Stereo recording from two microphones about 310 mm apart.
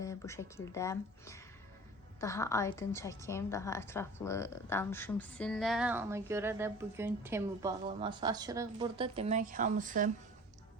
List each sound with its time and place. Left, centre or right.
0.0 s a woman's voice: centre; by 10.1 s right